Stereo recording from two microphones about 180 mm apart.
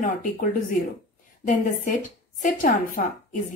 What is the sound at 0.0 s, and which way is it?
Speech, 50° left (ahead or behind).